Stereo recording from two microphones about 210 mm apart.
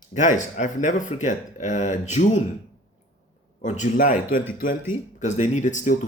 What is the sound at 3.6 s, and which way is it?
Speech, 35° left (ahead or behind).